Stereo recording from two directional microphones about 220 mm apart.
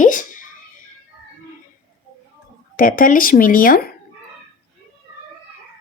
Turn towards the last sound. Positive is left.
turn(degrees=40)  # may be behind; listen again after turning